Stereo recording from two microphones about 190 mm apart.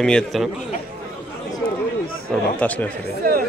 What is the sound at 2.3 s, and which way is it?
Speech, 10° left (ahead or behind).